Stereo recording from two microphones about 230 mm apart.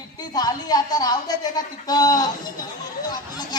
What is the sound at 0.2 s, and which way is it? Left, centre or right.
A woman's voice, centre.